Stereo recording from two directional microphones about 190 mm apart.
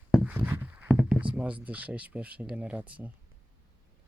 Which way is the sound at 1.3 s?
5° right (ahead or behind).